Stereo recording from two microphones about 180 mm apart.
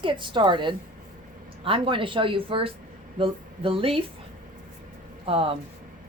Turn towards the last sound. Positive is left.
turn(degrees=-30)  # may be behind; listen again after turning